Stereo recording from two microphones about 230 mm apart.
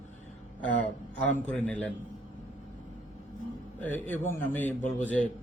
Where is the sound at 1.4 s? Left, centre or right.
Centre.